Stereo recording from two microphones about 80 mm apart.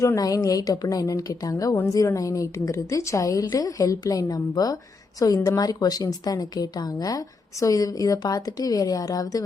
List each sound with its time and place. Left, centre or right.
0.2 s a woman's voice: left